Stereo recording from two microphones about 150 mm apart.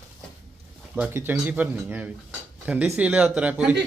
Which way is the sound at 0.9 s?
10° right (ahead or behind).